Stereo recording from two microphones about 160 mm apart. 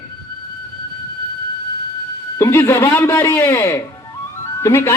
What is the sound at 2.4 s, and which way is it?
Speech, 15° left (ahead or behind).